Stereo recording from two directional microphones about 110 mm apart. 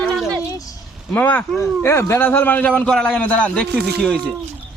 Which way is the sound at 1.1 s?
15° left (ahead or behind).